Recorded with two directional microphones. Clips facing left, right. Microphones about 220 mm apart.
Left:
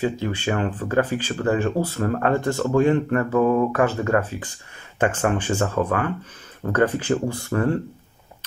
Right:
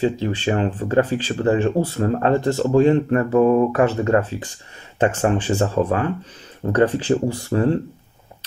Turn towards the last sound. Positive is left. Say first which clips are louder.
# right 3 dB
turn(degrees=-25)  # may be behind; listen again after turning